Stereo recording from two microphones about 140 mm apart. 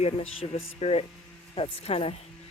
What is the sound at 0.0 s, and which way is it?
Speech, 45° left (ahead or behind).